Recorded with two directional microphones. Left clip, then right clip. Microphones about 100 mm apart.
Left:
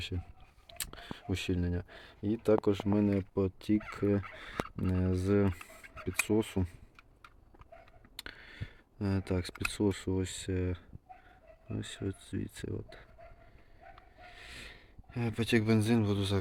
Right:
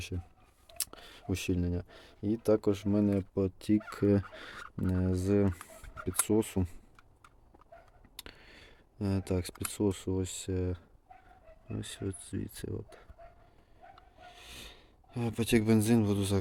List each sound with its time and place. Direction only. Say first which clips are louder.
0.7 s speech: even; 35° right (ahead or behind)
3.2 s speech: even; 35° right (ahead or behind)
3.8 s speech: right 3 dB; 80° right
4.9 s speech: right 1 dB; 30° right (ahead or behind)
5.9 s speech: even; 40° right (ahead or behind)
8.1 s speech: left 3 dB; 15° right (ahead or behind)
14.2 s a sound: left 1 dB; 20° right (ahead or behind)
15.4 s speech: right 2 dB; 45° right (ahead or behind)